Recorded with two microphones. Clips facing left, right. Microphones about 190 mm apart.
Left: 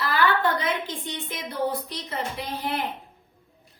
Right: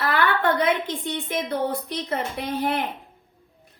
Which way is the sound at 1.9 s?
55° right (ahead or behind).